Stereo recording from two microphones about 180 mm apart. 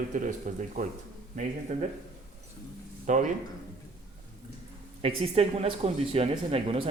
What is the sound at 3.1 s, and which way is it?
Speech, 45° right (ahead or behind).